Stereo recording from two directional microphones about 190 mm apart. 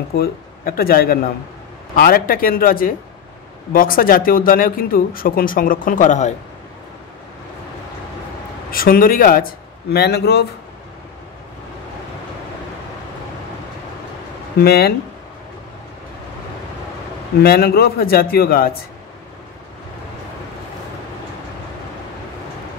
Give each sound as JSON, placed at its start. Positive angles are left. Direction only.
{"t": 0.1, "sound": "speech", "side_deg": 55}
{"t": 8.6, "sound": "speech", "side_deg": 50}
{"t": 9.9, "sound": "a man's voice", "side_deg": 60}
{"t": 14.6, "sound": "a man's voice", "side_deg": 55}
{"t": 17.4, "sound": "speech", "side_deg": 55}